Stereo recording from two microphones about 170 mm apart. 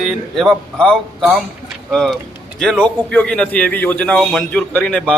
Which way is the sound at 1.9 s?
Centre (ahead or behind).